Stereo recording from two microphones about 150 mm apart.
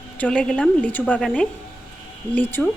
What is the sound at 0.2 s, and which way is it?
Speech, 5° left (ahead or behind).